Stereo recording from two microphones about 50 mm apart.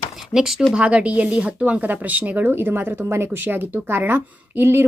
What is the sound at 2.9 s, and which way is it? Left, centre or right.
Speech, right.